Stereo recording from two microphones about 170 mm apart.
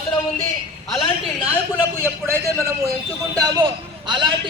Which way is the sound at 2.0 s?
15° right (ahead or behind).